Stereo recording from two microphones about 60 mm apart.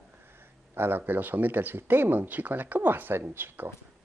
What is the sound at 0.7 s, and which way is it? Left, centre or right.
Speech, right.